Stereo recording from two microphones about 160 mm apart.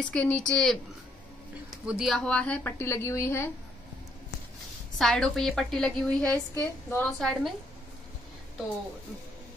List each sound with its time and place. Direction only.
0.1 s a woman's voice: 10° left (ahead or behind)
1.9 s a woman's voice: centre (ahead or behind); by 3.5 s 15° left (ahead or behind)
4.9 s a woman's voice: 5° left (ahead or behind)
7.1 s a woman's voice: centre (ahead or behind)